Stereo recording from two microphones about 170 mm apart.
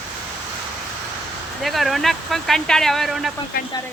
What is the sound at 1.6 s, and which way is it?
Speech, centre (ahead or behind).